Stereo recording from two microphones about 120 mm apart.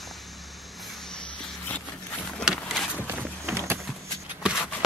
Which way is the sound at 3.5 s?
20° right (ahead or behind).